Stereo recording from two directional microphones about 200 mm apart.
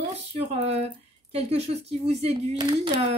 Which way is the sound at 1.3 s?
30° right (ahead or behind).